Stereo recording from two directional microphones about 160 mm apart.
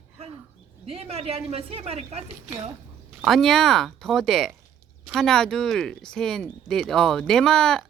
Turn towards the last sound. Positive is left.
turn(degrees=5)  # may be behind; listen again after turning